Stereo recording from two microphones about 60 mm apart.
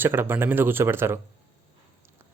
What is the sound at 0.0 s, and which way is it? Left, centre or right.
Speech, right.